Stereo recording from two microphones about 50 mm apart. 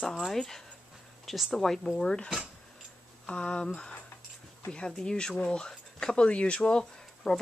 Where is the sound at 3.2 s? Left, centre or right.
Left.